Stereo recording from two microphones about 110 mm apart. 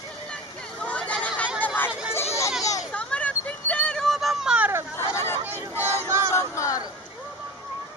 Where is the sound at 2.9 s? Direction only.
10° left (ahead or behind); by 4.7 s 10° right (ahead or behind).